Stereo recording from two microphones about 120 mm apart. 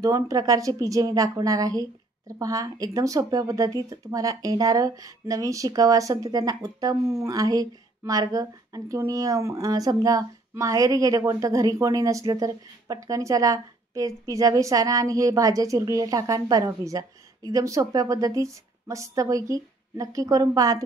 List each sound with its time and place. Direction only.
0.0 s a woman's voice: 30° right (ahead or behind)